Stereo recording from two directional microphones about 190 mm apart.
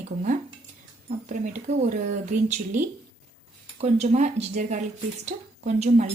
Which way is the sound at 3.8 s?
35° right (ahead or behind).